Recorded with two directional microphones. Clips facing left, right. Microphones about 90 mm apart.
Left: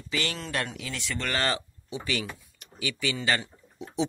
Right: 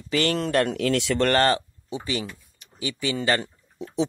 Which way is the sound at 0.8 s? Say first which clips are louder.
Right 12 dB; 70° right (ahead or behind).